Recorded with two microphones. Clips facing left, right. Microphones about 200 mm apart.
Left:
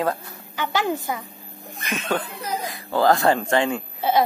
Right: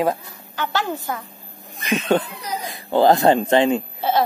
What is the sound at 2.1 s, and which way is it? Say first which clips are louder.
Speech: right 3 dB; 20° right (ahead or behind).